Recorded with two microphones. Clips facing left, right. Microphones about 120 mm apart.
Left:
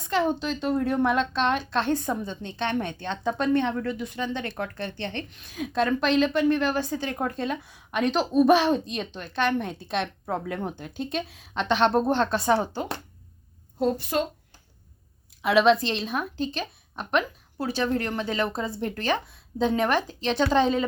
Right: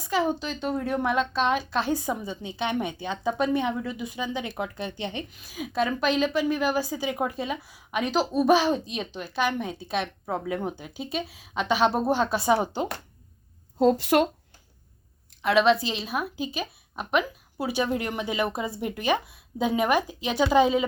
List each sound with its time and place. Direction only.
0.0 s a woman's voice: 5° right (ahead or behind)
14.0 s speech: 75° right (ahead or behind)
15.4 s speech: centre (ahead or behind)